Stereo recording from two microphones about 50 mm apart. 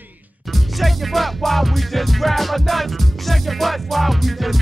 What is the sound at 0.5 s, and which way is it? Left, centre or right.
Music, centre.